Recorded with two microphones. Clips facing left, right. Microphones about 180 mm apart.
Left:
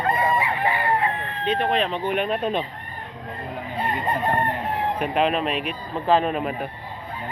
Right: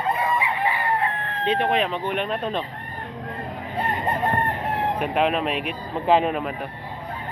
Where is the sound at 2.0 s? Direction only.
5° left (ahead or behind).